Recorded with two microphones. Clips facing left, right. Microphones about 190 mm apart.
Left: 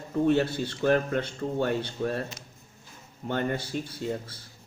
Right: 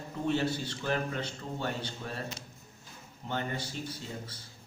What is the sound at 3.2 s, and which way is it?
Speech, 55° left (ahead or behind).